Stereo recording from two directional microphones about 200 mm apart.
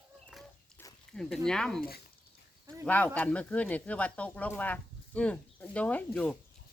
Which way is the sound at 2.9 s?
10° left (ahead or behind).